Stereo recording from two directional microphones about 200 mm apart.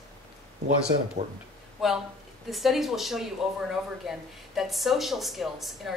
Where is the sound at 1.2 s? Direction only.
40° right (ahead or behind).